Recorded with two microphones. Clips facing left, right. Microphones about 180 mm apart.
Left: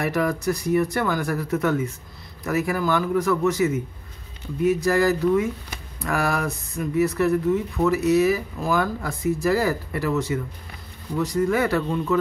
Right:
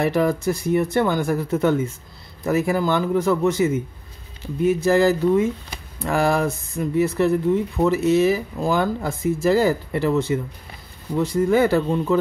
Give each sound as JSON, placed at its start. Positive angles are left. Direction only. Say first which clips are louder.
{"t": 0.0, "sound": "speech", "louder": "right 3 dB", "side_deg": -25}